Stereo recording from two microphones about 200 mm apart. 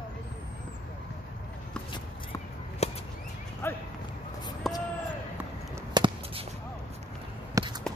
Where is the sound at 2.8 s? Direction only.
30° left (ahead or behind).